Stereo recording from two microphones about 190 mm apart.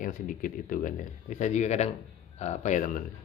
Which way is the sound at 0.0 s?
45° left (ahead or behind).